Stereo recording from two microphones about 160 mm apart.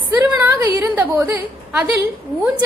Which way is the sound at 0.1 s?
10° right (ahead or behind).